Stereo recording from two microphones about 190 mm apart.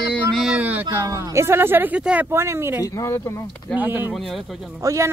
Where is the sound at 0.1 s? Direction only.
Centre (ahead or behind).